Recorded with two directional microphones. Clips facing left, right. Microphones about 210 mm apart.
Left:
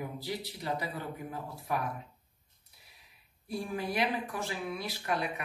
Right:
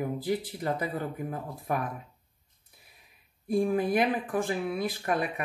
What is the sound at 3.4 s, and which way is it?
Speech, 50° right (ahead or behind).